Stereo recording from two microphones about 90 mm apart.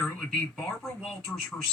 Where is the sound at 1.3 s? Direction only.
15° left (ahead or behind).